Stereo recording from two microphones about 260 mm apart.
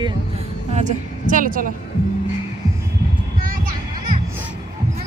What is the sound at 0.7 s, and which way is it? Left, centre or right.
A woman's voice, right.